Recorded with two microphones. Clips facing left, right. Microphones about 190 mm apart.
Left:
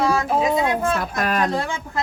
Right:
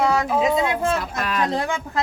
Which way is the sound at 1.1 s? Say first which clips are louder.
Left 2 dB; 45° left (ahead or behind).